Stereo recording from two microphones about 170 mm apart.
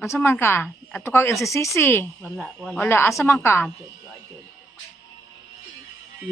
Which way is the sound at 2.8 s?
15° left (ahead or behind).